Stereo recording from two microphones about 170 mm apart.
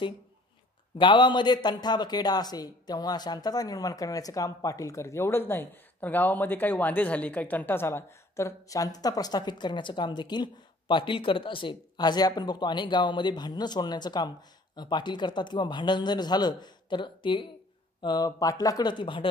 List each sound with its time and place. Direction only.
0.9 s a man's voice: 30° left (ahead or behind)